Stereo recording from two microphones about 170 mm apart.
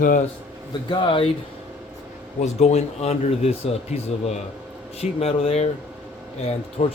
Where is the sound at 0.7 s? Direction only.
30° left (ahead or behind).